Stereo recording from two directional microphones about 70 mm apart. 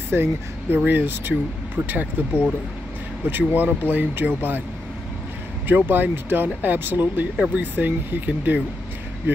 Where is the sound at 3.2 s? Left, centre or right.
Right.